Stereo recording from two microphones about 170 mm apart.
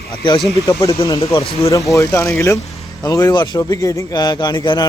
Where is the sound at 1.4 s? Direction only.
35° left (ahead or behind).